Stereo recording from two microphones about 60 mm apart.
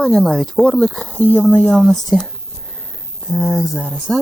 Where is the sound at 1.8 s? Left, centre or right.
Centre.